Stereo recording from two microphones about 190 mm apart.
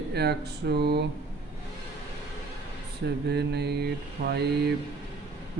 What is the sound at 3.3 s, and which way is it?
Speech, 60° right (ahead or behind).